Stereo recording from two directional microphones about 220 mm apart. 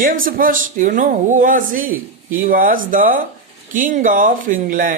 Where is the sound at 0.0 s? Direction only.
40° right (ahead or behind).